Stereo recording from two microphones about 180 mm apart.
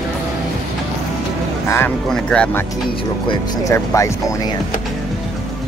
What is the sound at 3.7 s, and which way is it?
Speech, 15° left (ahead or behind).